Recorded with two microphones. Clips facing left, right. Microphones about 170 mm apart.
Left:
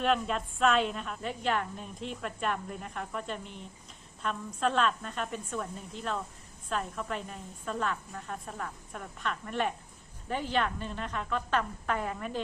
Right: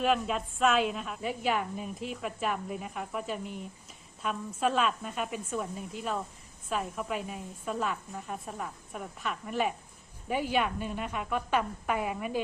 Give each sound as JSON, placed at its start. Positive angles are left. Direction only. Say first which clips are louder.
{"t": 0.0, "sound": "a woman's voice", "louder": "right 1 dB", "side_deg": -5}